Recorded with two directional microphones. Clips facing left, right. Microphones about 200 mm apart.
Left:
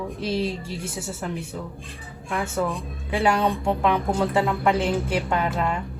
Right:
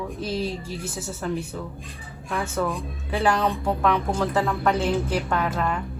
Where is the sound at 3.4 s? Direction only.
25° left (ahead or behind).